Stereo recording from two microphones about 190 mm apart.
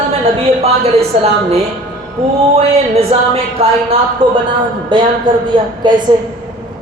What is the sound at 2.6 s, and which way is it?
A woman's voice, 35° right (ahead or behind).